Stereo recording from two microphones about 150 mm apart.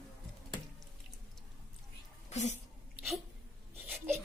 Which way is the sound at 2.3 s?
50° left (ahead or behind).